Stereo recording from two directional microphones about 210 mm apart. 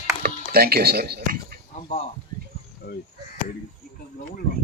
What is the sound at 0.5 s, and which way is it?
Speech, 45° right (ahead or behind).